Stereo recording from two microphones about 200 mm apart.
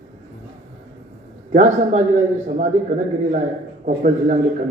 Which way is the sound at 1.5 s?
35° right (ahead or behind).